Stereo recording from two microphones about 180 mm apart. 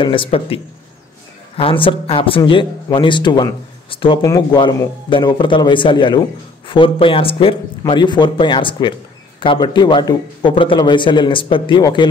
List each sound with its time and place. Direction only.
0.0 s a man's voice: 30° left (ahead or behind)
1.6 s a man's voice: 30° left (ahead or behind)